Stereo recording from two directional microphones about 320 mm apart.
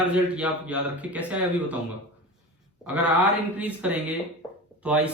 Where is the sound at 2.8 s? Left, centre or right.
Centre.